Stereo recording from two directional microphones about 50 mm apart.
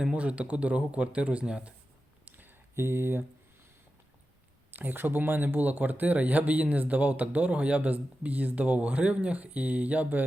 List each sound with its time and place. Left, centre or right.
0.0 s speech: right
2.2 s a sound: right
2.7 s speech: right
4.7 s speech: right